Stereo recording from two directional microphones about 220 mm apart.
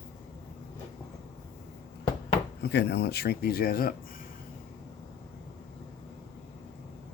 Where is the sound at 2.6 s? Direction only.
50° left (ahead or behind).